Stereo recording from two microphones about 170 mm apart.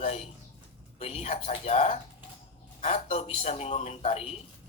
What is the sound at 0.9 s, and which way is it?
Speech, 40° left (ahead or behind).